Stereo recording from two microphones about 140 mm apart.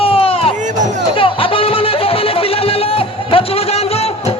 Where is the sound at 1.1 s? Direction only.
40° left (ahead or behind).